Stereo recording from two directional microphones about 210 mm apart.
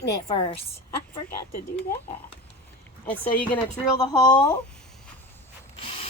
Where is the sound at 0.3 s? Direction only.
25° left (ahead or behind).